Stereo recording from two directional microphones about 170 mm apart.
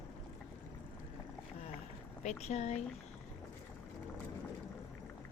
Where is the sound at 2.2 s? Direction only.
40° left (ahead or behind).